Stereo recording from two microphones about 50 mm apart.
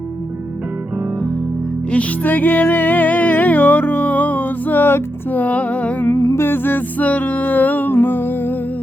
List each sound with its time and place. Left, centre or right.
2.2 s music: left
5.3 s music: left
6.1 s music: left